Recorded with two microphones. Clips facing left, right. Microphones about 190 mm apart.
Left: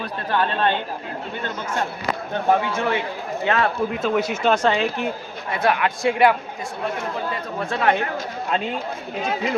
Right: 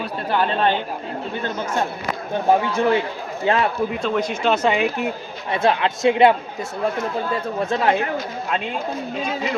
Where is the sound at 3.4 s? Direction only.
30° right (ahead or behind).